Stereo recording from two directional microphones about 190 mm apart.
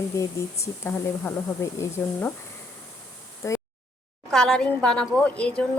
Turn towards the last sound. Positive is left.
turn(degrees=5)  # may be behind; listen again after turning